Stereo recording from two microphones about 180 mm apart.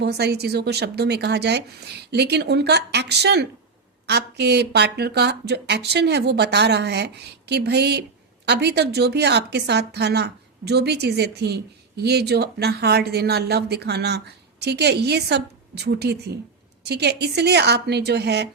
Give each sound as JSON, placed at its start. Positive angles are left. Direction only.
{"t": 0.0, "sound": "a woman's voice", "side_deg": -65}